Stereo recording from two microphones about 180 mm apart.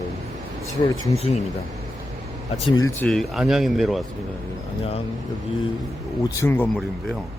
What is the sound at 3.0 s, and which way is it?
Speech, 5° left (ahead or behind).